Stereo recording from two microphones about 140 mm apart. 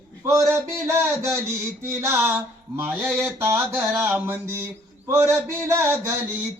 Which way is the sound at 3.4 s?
20° right (ahead or behind).